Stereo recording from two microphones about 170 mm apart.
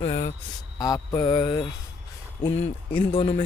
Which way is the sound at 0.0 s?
40° left (ahead or behind).